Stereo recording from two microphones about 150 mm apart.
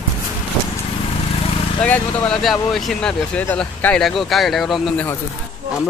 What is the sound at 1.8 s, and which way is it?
Speech, 5° left (ahead or behind).